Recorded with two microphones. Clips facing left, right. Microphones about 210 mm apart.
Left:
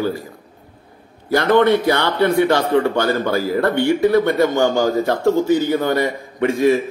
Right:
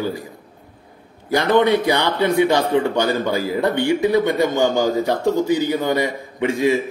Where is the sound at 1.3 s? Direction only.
15° right (ahead or behind).